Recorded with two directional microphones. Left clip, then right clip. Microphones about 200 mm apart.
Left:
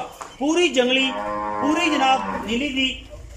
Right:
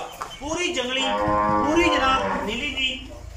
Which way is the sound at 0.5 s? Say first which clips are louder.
Left 7 dB; 60° left (ahead or behind).